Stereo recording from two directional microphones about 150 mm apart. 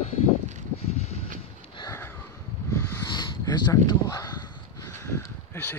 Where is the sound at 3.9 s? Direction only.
25° left (ahead or behind).